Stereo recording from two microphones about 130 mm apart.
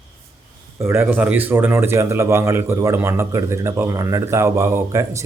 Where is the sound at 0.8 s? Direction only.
20° right (ahead or behind).